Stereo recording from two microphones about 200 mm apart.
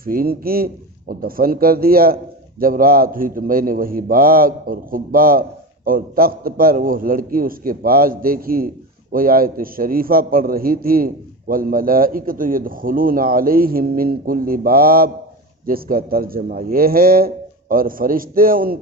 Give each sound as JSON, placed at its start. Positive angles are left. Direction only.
{"t": 0.0, "sound": "a man's voice", "side_deg": -45}